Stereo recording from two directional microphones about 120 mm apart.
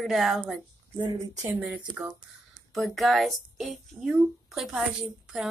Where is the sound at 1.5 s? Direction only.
10° right (ahead or behind).